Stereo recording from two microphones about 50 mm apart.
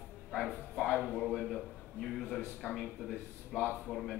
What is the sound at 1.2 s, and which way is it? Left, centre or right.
A man's voice, centre.